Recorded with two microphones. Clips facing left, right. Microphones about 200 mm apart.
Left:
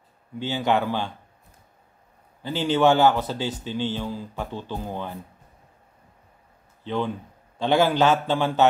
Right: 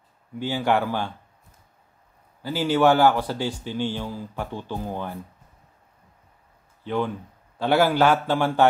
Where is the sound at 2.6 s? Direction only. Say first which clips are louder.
Even; 10° right (ahead or behind).